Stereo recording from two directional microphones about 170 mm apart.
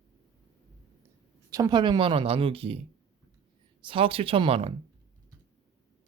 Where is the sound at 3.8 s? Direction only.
30° right (ahead or behind).